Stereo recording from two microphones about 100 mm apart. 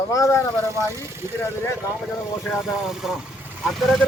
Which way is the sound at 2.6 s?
5° right (ahead or behind).